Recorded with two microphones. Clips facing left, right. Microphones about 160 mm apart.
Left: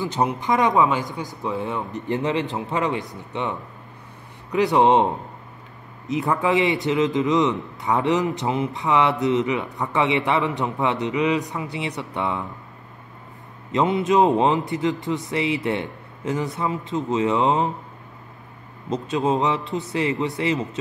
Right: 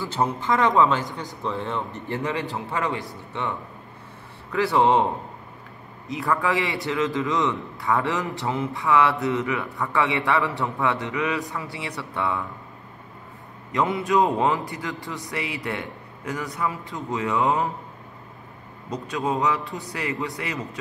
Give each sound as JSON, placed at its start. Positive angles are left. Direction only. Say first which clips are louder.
{"t": 0.0, "sound": "a man's voice", "louder": "left 2 dB", "side_deg": 15}
{"t": 6.0, "sound": "a man's voice", "louder": "left 3 dB", "side_deg": 20}
{"t": 13.7, "sound": "a man's voice", "louder": "left 4 dB", "side_deg": 20}
{"t": 18.9, "sound": "a man's voice", "louder": "left 5 dB", "side_deg": 25}